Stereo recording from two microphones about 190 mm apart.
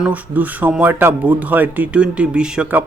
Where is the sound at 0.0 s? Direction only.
10° right (ahead or behind).